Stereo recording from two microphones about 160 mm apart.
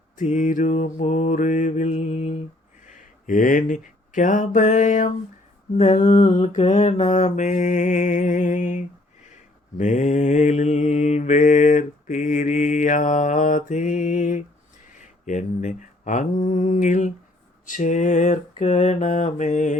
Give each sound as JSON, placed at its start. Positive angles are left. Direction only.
{"t": 0.2, "sound": "mantra", "side_deg": 50}
{"t": 2.9, "sound": "a sound", "side_deg": 55}
{"t": 5.7, "sound": "mantra", "side_deg": 50}
{"t": 7.0, "sound": "mantra", "side_deg": 40}